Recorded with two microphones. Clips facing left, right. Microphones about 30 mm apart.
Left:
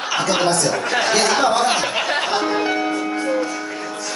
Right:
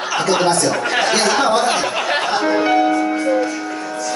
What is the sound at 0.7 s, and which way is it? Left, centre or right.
Speech, centre.